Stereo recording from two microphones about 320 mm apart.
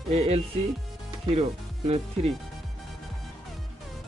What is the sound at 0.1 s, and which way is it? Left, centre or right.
Speech, centre.